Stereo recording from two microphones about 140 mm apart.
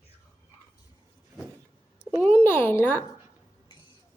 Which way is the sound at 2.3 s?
15° left (ahead or behind).